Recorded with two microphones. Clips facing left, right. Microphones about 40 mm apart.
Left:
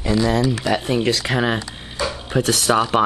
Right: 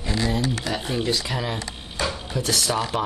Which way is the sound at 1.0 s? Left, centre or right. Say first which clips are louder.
Left 6 dB; left.